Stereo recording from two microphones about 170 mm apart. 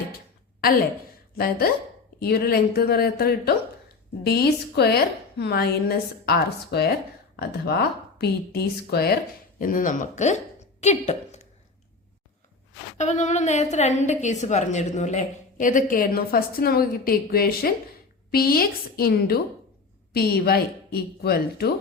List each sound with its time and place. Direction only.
1.4 s a woman's voice: 60° left (ahead or behind)
9.6 s a woman's voice: 55° left (ahead or behind)
13.0 s a woman's voice: 45° left (ahead or behind); by 21.7 s 70° left (ahead or behind)